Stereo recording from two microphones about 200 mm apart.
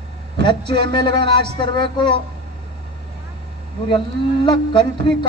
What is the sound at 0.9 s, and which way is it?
Speech, 25° left (ahead or behind).